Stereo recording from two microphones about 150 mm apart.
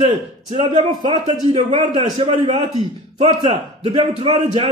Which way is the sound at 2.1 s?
40° right (ahead or behind).